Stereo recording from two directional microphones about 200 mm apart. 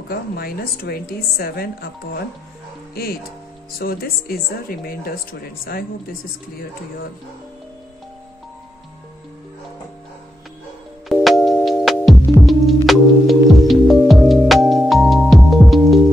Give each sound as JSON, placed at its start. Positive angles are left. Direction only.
{"t": 0.1, "sound": "a woman's voice", "side_deg": 50}
{"t": 11.1, "sound": "music", "side_deg": 0}